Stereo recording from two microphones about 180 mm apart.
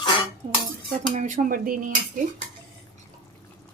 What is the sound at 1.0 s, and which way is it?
Dishes, 45° right (ahead or behind).